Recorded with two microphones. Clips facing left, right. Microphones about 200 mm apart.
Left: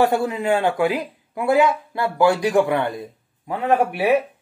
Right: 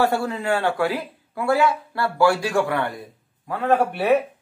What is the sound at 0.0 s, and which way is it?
Speech, 15° left (ahead or behind).